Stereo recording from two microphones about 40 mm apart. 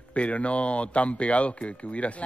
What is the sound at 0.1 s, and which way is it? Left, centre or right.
Speech, left.